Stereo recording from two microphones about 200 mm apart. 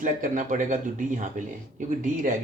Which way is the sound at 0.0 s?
40° right (ahead or behind).